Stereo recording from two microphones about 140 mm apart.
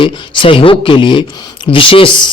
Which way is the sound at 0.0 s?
35° left (ahead or behind).